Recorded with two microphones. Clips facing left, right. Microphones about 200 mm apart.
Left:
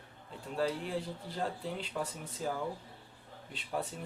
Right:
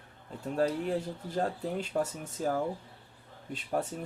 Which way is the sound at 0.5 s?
45° right (ahead or behind).